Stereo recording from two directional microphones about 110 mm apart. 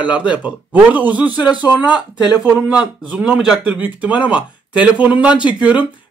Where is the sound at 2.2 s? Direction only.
10° right (ahead or behind).